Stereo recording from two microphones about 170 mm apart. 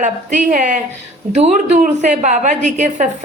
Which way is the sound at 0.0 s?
45° right (ahead or behind).